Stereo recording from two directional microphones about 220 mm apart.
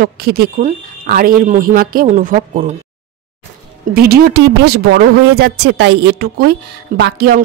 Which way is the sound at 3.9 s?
45° right (ahead or behind).